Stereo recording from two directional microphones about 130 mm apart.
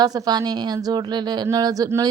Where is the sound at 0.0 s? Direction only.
30° right (ahead or behind).